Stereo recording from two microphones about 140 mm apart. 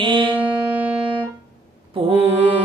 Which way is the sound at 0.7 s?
10° right (ahead or behind).